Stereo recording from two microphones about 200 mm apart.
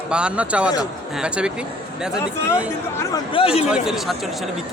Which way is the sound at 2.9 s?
20° left (ahead or behind).